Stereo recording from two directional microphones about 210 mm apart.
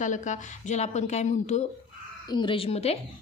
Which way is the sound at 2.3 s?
20° left (ahead or behind).